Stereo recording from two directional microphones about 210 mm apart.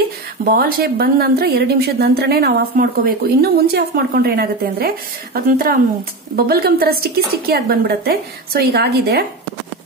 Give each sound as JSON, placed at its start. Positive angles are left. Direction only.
{"t": 0.5, "sound": "a woman's voice", "side_deg": -45}